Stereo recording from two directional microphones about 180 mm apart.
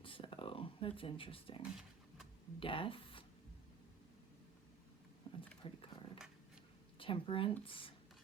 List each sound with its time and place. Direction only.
0.0 s a sound: 30° left (ahead or behind)
2.6 s speech: 30° left (ahead or behind)
5.2 s horse: 30° left (ahead or behind)
7.0 s speech: 30° left (ahead or behind)